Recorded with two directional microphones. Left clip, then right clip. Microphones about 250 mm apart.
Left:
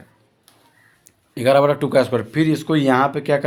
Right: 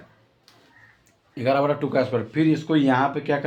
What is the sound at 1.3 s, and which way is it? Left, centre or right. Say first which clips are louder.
Speech: left 6 dB; left.